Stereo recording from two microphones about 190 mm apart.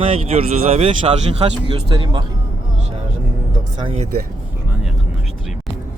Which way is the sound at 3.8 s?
30° right (ahead or behind).